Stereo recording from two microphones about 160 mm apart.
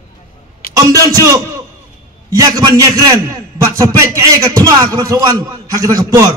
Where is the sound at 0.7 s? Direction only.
20° right (ahead or behind).